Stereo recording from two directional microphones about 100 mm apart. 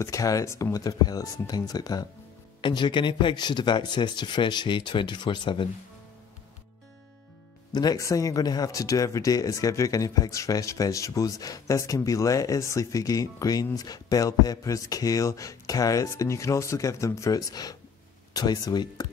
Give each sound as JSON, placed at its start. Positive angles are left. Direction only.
{"t": 0.0, "sound": "speech", "side_deg": 35}
{"t": 2.6, "sound": "speech", "side_deg": 50}
{"t": 7.7, "sound": "speech", "side_deg": 40}